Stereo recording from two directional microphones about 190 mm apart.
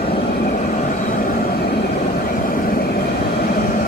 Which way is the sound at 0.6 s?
45° left (ahead or behind).